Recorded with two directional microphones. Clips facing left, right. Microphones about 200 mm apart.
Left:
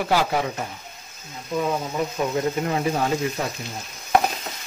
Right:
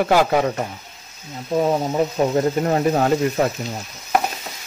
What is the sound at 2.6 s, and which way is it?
Speech, 45° right (ahead or behind).